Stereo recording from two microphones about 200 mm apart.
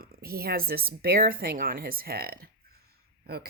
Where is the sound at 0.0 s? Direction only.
50° right (ahead or behind).